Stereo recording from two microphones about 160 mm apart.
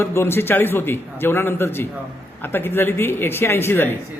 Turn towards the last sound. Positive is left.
turn(degrees=15)  # may be behind; listen again after turning